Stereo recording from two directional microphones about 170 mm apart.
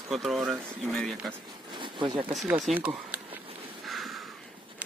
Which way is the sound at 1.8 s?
30° right (ahead or behind).